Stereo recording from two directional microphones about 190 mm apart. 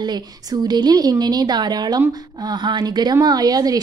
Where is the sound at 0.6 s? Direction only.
20° right (ahead or behind).